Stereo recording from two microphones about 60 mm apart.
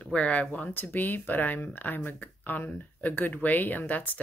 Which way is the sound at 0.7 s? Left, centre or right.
Left.